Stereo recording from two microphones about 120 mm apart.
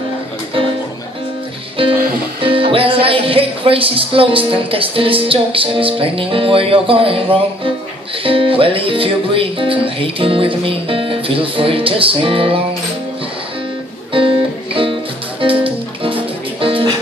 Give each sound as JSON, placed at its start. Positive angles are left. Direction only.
{"t": 1.8, "sound": "music", "side_deg": -50}
{"t": 2.4, "sound": "speech", "side_deg": -50}
{"t": 14.1, "sound": "music", "side_deg": -50}